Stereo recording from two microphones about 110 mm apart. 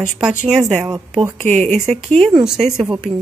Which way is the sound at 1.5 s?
15° left (ahead or behind).